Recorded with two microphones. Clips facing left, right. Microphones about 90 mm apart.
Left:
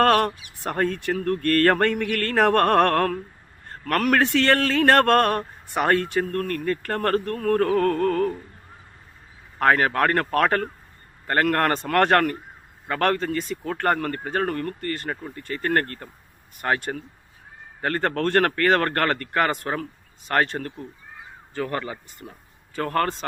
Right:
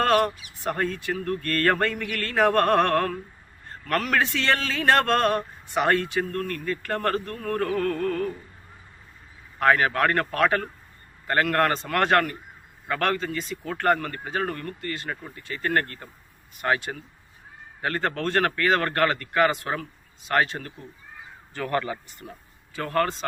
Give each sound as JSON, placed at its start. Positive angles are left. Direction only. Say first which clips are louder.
{"t": 0.0, "sound": "a man's voice", "louder": "left 3 dB", "side_deg": 55}
{"t": 9.6, "sound": "a man's voice", "louder": "left 1 dB", "side_deg": 40}
{"t": 21.5, "sound": "speech", "louder": "right 1 dB", "side_deg": 25}
{"t": 22.7, "sound": "a man's voice", "louder": "left 1 dB", "side_deg": 50}